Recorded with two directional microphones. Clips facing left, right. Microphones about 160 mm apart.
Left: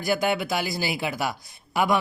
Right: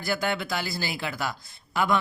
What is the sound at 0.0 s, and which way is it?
Speech, 15° left (ahead or behind).